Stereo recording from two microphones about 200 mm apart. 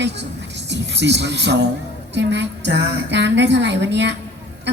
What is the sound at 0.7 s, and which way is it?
A woman's voice, 60° right (ahead or behind).